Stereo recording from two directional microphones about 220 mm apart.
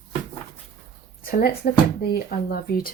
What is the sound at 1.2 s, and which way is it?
A woman's voice, 40° left (ahead or behind).